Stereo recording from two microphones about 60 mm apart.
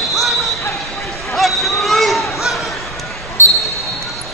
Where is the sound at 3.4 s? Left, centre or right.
Left.